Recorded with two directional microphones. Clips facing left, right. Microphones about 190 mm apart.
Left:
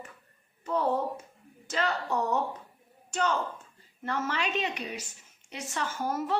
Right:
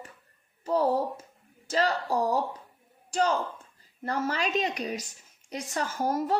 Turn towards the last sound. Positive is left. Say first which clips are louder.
# right 3 dB
turn(degrees=-40)  # may be behind; listen again after turning